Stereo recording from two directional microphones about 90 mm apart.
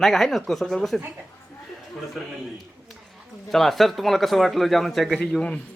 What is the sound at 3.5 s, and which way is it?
Speech, centre (ahead or behind).